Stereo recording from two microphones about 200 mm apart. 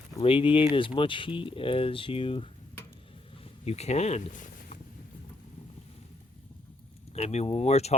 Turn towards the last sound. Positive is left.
turn(degrees=30)  # may be behind; listen again after turning